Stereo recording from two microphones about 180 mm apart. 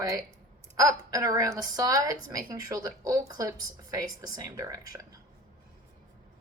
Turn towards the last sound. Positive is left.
turn(degrees=-20)  # may be behind; listen again after turning